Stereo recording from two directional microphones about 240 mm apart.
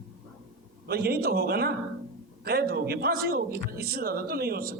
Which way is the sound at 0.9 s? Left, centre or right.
Right.